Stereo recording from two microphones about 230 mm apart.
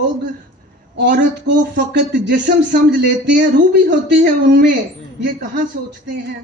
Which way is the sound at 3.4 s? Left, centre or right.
Right.